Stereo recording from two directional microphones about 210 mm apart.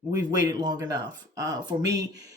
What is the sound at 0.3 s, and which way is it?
Speech, 20° right (ahead or behind).